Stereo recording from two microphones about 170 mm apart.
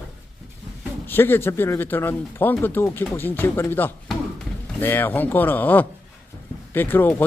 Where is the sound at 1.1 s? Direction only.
10° left (ahead or behind).